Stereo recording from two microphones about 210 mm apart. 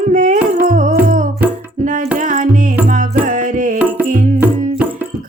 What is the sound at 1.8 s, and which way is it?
Singing, 40° right (ahead or behind).